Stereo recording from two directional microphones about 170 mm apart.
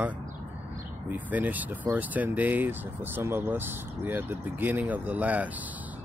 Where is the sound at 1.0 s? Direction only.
10° right (ahead or behind).